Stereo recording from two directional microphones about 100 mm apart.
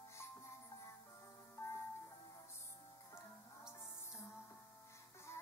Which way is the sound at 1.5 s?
30° left (ahead or behind).